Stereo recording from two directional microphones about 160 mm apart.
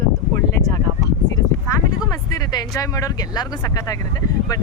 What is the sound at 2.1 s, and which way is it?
Speech, 25° left (ahead or behind).